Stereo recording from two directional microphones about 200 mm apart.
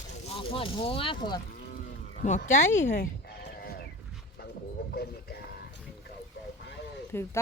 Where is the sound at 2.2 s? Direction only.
35° left (ahead or behind).